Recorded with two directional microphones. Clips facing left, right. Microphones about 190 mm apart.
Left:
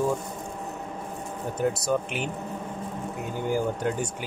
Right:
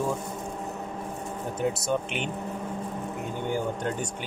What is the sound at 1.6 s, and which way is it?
Speech, centre (ahead or behind).